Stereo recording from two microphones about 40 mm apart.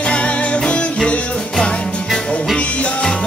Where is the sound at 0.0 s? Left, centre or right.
Left.